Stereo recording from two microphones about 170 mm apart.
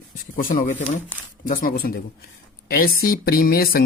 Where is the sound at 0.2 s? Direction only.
55° left (ahead or behind).